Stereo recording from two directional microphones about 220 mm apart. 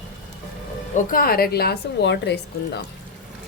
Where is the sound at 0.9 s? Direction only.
40° left (ahead or behind).